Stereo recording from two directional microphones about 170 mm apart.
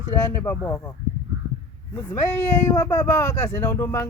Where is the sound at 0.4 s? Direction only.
15° left (ahead or behind).